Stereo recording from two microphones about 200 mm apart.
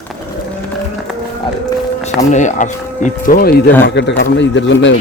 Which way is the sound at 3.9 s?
60° left (ahead or behind).